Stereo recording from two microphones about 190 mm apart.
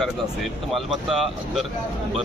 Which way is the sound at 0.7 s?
Centre (ahead or behind).